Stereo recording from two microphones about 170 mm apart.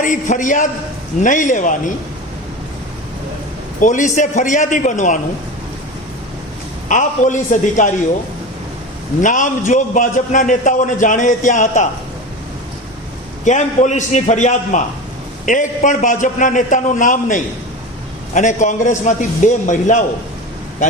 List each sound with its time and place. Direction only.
0.0 s a man's voice: 50° left (ahead or behind)
3.8 s a man's voice: 50° left (ahead or behind)
6.8 s a man's voice: 45° left (ahead or behind)
9.2 s a man's voice: 50° left (ahead or behind)
13.4 s a man's voice: 45° left (ahead or behind)